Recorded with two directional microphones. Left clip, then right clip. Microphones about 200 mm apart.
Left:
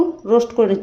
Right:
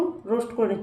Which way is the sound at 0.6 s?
50° left (ahead or behind).